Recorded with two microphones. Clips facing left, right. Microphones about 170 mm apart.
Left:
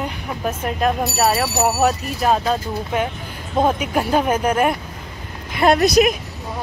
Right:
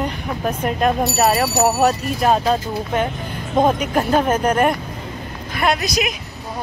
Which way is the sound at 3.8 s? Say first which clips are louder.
Right 1 dB; 5° left (ahead or behind).